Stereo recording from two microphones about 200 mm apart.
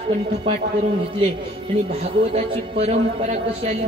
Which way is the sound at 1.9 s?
30° right (ahead or behind).